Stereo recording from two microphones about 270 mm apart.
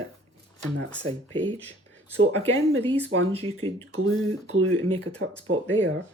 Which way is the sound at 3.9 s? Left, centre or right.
Right.